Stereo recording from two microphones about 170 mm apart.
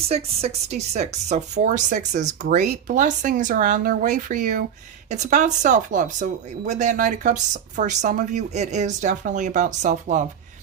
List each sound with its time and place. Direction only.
0.1 s speech: 40° right (ahead or behind)